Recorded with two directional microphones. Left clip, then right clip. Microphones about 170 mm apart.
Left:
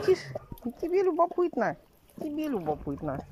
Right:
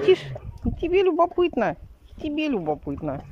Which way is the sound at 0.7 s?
15° right (ahead or behind).